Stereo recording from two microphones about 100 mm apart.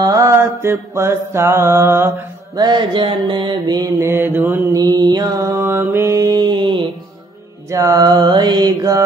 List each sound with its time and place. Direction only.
0.0 s mantra: 35° right (ahead or behind)
2.5 s mantra: 45° right (ahead or behind)
4.0 s mantra: 25° right (ahead or behind)
4.7 s mantra: 40° right (ahead or behind)
7.7 s mantra: 35° right (ahead or behind)